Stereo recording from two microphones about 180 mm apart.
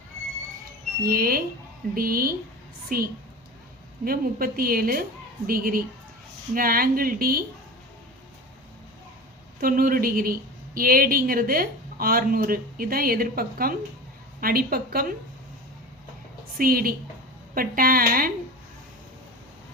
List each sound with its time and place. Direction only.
1.0 s a woman's voice: 55° right (ahead or behind)
9.6 s a woman's voice: 50° right (ahead or behind)
16.6 s speech: 55° right (ahead or behind)